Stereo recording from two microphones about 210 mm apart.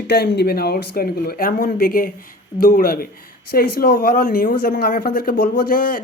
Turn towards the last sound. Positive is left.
turn(degrees=40)  # may be behind; listen again after turning